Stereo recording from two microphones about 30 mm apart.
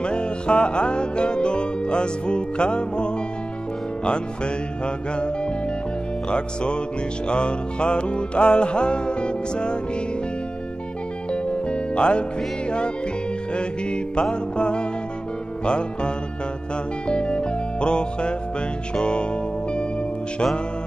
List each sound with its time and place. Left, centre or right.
0.0 s music: left
4.8 s music: left
11.4 s music: left
17.1 s music: left